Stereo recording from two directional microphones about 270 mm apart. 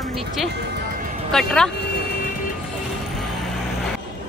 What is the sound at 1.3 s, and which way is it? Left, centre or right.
Speech, centre.